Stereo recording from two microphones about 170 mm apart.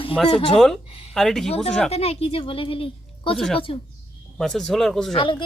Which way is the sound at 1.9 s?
35° left (ahead or behind).